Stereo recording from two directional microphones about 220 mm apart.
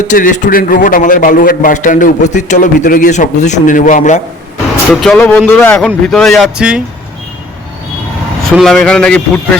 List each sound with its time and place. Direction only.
0.1 s a man's voice: 35° left (ahead or behind)
4.9 s speech: 5° left (ahead or behind)
8.4 s speech: centre (ahead or behind)